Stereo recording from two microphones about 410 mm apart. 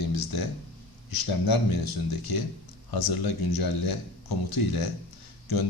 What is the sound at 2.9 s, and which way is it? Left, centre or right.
A man's voice, left.